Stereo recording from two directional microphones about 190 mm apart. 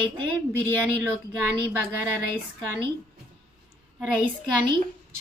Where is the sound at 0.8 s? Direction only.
10° right (ahead or behind).